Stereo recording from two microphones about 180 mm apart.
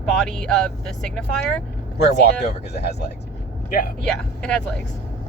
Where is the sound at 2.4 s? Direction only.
65° left (ahead or behind).